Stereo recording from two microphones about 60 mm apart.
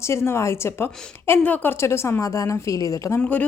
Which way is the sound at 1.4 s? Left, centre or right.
Left.